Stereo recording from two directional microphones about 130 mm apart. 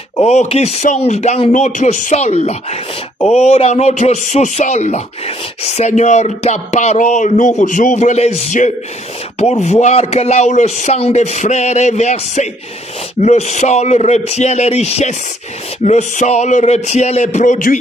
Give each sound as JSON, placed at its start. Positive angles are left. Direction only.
{"t": 0.2, "sound": "a man's voice", "side_deg": 55}